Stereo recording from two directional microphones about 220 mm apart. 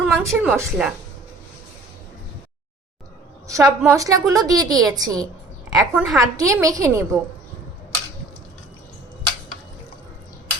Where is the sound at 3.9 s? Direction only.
15° right (ahead or behind).